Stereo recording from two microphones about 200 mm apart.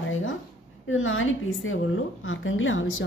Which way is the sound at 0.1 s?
75° left (ahead or behind).